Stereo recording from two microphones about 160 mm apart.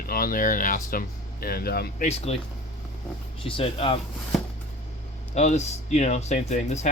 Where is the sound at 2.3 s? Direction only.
40° left (ahead or behind).